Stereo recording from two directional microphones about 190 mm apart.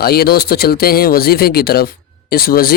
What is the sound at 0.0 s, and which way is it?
Speech, 55° left (ahead or behind).